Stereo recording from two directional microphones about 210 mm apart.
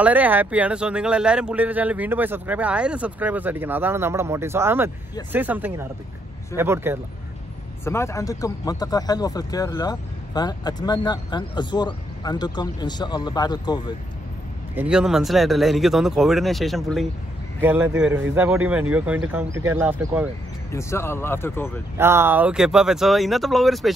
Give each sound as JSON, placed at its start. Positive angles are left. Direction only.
{"t": 0.0, "sound": "speech", "side_deg": -5}
{"t": 7.8, "sound": "speech", "side_deg": 10}
{"t": 14.8, "sound": "speech", "side_deg": -5}
{"t": 17.6, "sound": "speech", "side_deg": -10}
{"t": 20.7, "sound": "speech", "side_deg": 10}
{"t": 21.9, "sound": "speech", "side_deg": -10}